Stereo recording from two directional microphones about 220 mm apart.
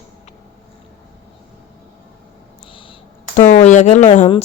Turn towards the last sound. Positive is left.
turn(degrees=30)  # may be behind; listen again after turning